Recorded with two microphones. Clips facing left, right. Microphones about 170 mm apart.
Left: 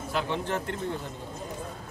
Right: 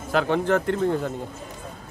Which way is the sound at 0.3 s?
60° right (ahead or behind).